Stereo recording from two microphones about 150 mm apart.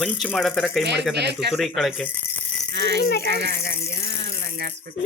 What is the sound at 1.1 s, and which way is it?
Speech, 90° right.